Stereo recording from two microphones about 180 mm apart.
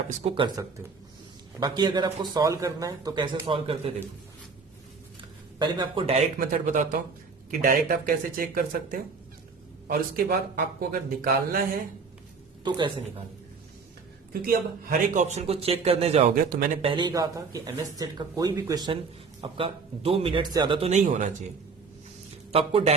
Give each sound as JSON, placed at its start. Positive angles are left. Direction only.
{"t": 0.2, "sound": "a man's voice", "side_deg": -30}
{"t": 5.5, "sound": "a man's voice", "side_deg": -25}
{"t": 12.6, "sound": "a man's voice", "side_deg": -25}
{"t": 14.4, "sound": "a man's voice", "side_deg": -50}
{"t": 16.3, "sound": "speech", "side_deg": -55}
{"t": 16.8, "sound": "a man's voice", "side_deg": -25}
{"t": 22.5, "sound": "a man's voice", "side_deg": -35}